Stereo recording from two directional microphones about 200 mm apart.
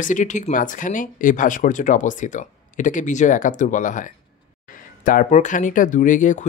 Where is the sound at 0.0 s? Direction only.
40° left (ahead or behind).